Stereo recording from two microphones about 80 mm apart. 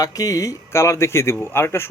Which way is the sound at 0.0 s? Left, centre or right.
Left.